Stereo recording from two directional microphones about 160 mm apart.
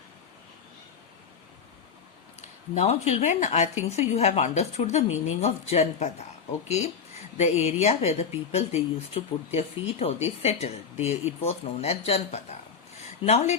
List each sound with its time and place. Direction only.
2.7 s a woman's voice: 40° left (ahead or behind)